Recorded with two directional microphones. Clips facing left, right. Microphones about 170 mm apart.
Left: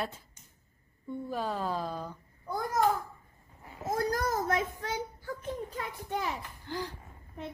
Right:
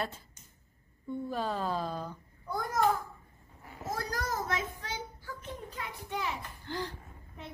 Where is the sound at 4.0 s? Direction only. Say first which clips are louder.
Left 6 dB; 45° left (ahead or behind).